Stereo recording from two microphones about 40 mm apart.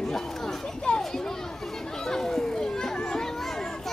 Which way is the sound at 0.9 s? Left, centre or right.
Left.